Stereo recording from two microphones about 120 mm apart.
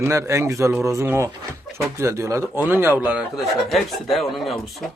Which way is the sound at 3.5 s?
Centre (ahead or behind).